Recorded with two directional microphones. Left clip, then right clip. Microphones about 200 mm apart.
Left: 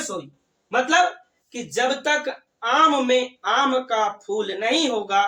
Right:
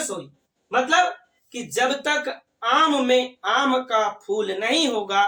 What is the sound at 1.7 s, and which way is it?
Speech, 20° right (ahead or behind).